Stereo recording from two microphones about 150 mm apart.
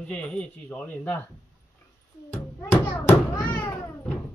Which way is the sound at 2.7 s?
15° left (ahead or behind).